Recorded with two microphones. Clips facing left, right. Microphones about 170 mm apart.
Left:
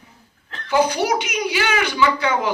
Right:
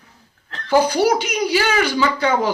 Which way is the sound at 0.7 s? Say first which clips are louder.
Right 3 dB; 35° right (ahead or behind).